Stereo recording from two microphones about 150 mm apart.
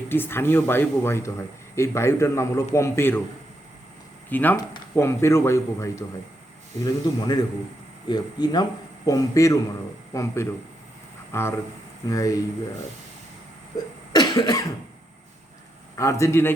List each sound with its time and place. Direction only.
0.1 s speech: 15° left (ahead or behind)
4.3 s speech: 10° left (ahead or behind)
14.1 s cough: 25° left (ahead or behind)
16.0 s speech: 20° left (ahead or behind)